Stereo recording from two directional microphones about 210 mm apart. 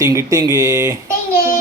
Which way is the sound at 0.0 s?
15° right (ahead or behind).